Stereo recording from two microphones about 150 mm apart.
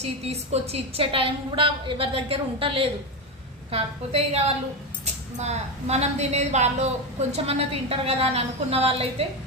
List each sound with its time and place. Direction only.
0.0 s a woman's voice: 45° right (ahead or behind)